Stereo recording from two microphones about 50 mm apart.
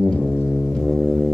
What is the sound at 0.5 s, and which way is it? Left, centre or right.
Brass instrument, centre.